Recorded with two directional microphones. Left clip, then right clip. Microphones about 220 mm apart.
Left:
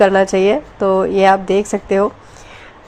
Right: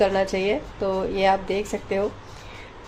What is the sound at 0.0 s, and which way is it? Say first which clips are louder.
Speech: left 10 dB; 30° left (ahead or behind).